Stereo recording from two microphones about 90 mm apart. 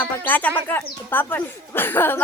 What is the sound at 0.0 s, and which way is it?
Speech, 20° left (ahead or behind).